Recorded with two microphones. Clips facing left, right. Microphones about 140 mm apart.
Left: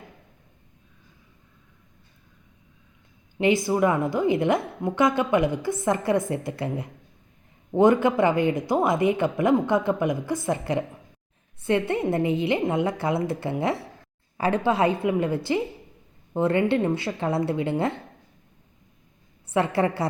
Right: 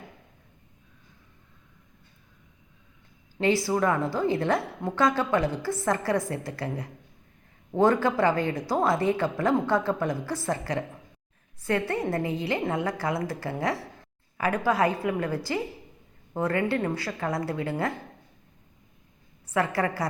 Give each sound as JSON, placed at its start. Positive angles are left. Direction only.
{"t": 3.4, "sound": "a woman's voice", "side_deg": 20}
{"t": 19.5, "sound": "a woman's voice", "side_deg": 25}